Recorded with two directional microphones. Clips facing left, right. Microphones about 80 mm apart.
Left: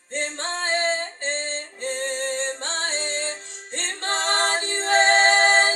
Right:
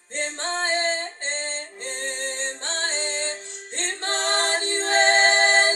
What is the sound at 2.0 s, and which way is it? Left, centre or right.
Music, left.